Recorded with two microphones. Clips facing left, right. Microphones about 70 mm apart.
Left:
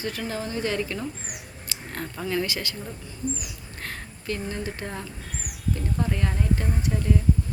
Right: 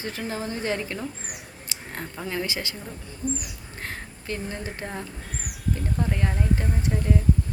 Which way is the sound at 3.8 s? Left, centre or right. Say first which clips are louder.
Right 1 dB; right.